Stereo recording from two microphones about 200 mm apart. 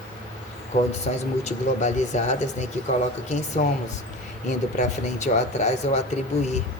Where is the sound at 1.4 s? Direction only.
35° left (ahead or behind).